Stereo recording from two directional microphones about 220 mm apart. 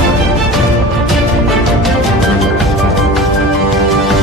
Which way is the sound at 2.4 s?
Centre (ahead or behind).